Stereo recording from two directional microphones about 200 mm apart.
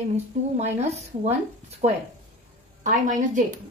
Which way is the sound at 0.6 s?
35° right (ahead or behind).